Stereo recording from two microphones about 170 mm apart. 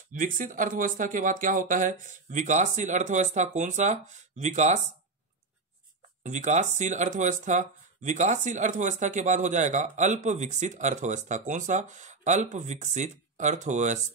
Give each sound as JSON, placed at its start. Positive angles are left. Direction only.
{"t": 0.1, "sound": "speech", "side_deg": -50}
{"t": 6.2, "sound": "speech", "side_deg": -45}